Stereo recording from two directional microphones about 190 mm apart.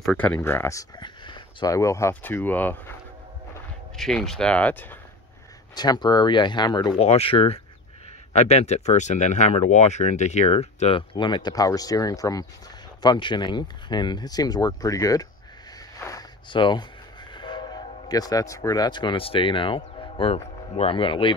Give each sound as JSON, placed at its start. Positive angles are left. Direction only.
{"t": 0.0, "sound": "speech", "side_deg": 5}
{"t": 5.8, "sound": "speech", "side_deg": 20}